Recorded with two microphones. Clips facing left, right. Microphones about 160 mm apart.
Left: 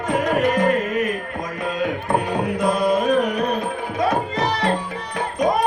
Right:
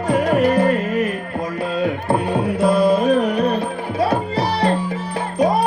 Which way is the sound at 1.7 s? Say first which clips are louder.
Right 2 dB; 30° right (ahead or behind).